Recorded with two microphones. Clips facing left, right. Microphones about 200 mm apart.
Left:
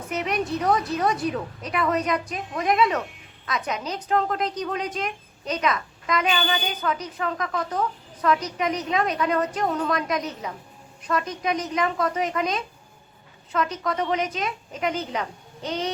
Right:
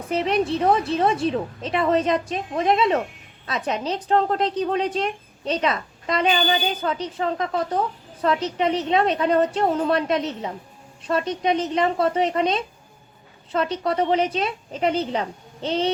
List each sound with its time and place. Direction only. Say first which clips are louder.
0.1 s a woman's voice: right 5 dB; 30° right (ahead or behind)